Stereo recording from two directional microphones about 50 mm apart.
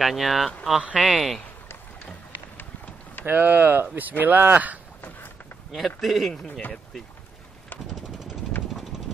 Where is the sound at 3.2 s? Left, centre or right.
Right.